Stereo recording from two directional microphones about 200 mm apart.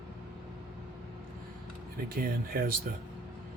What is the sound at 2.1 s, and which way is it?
Speech, 45° right (ahead or behind).